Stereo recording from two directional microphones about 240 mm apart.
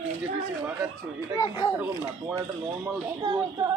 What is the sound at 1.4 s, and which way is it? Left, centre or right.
Speech, centre.